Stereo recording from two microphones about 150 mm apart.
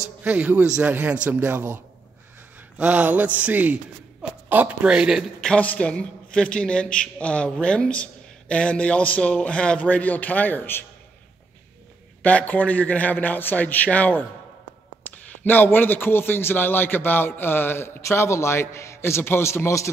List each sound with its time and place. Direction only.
0.2 s a man's voice: 10° right (ahead or behind)
2.8 s a man's voice: 10° right (ahead or behind); by 10.9 s 15° left (ahead or behind)
12.2 s a man's voice: 10° left (ahead or behind)
15.4 s a man's voice: 15° left (ahead or behind)